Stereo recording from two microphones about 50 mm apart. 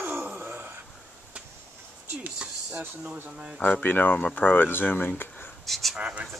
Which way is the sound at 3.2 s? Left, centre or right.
Right.